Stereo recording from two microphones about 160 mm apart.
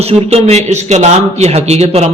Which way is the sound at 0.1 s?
40° right (ahead or behind).